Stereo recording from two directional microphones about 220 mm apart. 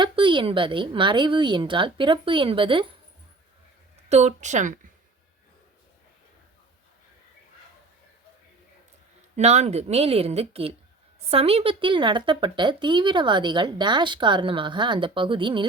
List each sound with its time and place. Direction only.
0.0 s speech: 20° right (ahead or behind)
4.1 s a woman's voice: 30° right (ahead or behind)
9.3 s speech: 30° right (ahead or behind)